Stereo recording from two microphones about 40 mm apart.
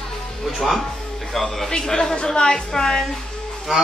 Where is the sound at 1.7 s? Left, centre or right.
Centre.